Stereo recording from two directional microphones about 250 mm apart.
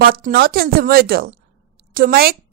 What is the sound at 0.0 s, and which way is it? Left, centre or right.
A woman's voice, right.